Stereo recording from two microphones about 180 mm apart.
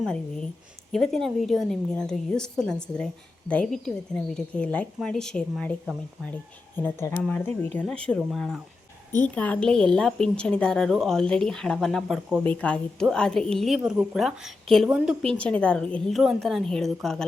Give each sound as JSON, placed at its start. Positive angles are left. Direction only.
{"t": 0.9, "sound": "a woman's voice", "side_deg": 0}